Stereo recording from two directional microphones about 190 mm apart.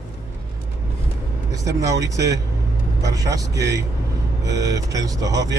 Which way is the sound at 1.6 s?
15° right (ahead or behind).